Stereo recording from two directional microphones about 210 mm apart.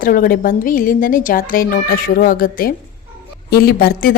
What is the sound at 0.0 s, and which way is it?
A woman's voice, 45° left (ahead or behind).